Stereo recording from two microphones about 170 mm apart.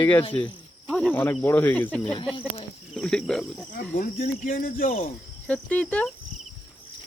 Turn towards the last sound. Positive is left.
turn(degrees=10)  # may be behind; listen again after turning